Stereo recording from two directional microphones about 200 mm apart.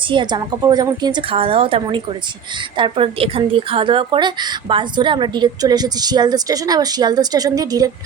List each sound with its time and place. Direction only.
0.1 s speech: 20° right (ahead or behind)